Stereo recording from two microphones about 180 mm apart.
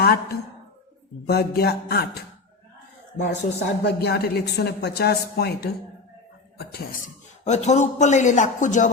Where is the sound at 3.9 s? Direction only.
65° left (ahead or behind).